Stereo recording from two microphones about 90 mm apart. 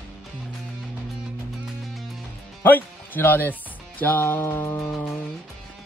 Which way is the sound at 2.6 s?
20° left (ahead or behind).